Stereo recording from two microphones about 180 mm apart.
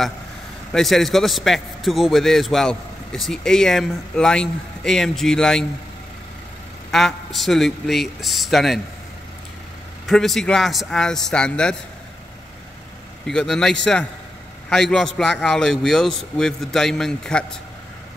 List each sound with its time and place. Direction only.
0.7 s a man's voice: centre (ahead or behind)
6.9 s a man's voice: centre (ahead or behind)
10.0 s a man's voice: centre (ahead or behind)
13.3 s a man's voice: 5° left (ahead or behind)